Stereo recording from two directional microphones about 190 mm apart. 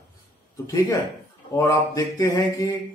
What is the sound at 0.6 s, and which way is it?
Speech, 20° left (ahead or behind).